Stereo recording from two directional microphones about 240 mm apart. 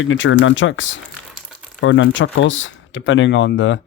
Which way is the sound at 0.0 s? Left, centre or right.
Left.